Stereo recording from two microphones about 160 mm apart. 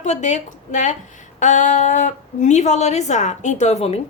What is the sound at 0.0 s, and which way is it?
A woman's voice, 50° left (ahead or behind).